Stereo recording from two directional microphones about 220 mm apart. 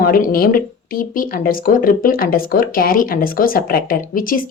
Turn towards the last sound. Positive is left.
turn(degrees=40)  # may be behind; listen again after turning